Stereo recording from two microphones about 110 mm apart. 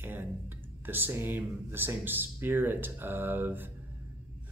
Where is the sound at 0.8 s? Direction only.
20° right (ahead or behind).